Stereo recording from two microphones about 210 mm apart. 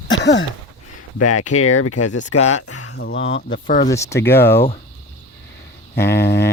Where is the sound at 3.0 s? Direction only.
60° left (ahead or behind).